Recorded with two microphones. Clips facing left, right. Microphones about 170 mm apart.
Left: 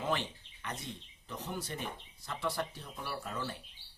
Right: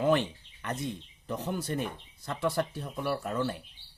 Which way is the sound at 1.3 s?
55° right (ahead or behind).